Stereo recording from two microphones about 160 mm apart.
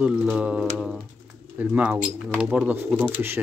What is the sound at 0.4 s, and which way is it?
Speech, 5° right (ahead or behind).